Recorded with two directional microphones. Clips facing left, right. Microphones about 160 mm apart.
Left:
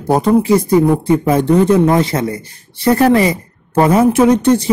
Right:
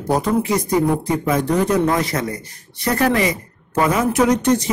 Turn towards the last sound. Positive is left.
turn(degrees=30)  # may be behind; listen again after turning